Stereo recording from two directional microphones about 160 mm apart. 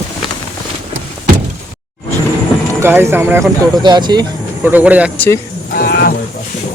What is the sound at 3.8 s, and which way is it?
Speech, 25° right (ahead or behind).